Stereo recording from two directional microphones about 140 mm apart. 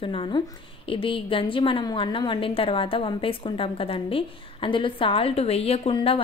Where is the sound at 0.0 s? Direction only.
40° left (ahead or behind).